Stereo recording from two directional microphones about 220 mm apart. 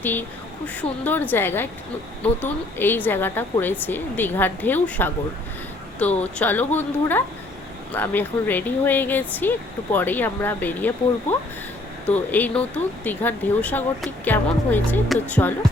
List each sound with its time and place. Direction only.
0.0 s speech: 10° left (ahead or behind)
6.4 s speech: 10° left (ahead or behind)
12.0 s speech: 5° left (ahead or behind)